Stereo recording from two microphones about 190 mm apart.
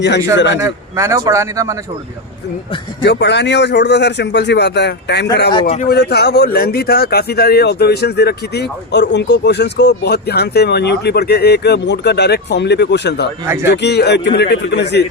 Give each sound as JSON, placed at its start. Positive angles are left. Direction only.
{"t": 0.3, "sound": "a man's voice", "side_deg": 70}
{"t": 0.6, "sound": "a man's voice", "side_deg": -15}
{"t": 3.0, "sound": "speech", "side_deg": 65}
{"t": 5.5, "sound": "a man's voice", "side_deg": 30}
{"t": 5.9, "sound": "speech", "side_deg": 60}